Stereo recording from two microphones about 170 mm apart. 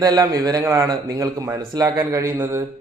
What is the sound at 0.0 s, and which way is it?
A man's voice, 20° right (ahead or behind).